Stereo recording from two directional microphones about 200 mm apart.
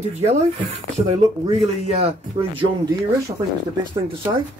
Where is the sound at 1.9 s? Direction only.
30° right (ahead or behind).